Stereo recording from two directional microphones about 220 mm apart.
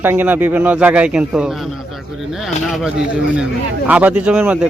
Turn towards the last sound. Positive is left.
turn(degrees=-5)  # may be behind; listen again after turning